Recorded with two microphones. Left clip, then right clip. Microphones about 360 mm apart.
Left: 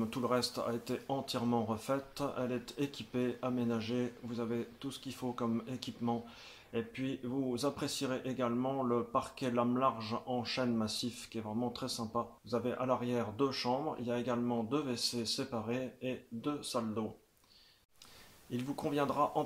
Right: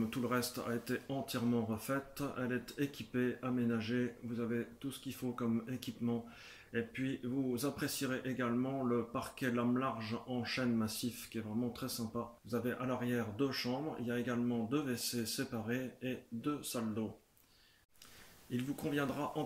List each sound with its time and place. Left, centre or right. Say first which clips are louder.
0.1 s speech: left 4 dB; centre
18.5 s speech: left 2 dB; centre